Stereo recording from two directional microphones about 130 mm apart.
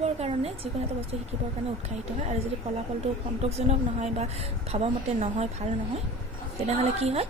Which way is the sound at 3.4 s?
55° right (ahead or behind).